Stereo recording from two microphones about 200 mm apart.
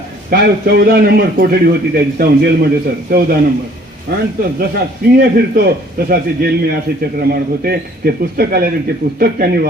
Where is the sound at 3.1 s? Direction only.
45° right (ahead or behind).